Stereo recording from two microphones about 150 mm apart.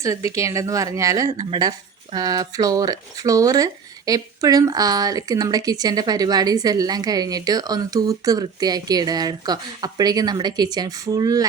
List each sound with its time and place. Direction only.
0.3 s speech: 20° right (ahead or behind)